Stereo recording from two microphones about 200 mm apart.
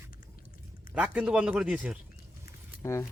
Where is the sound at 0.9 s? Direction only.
5° right (ahead or behind).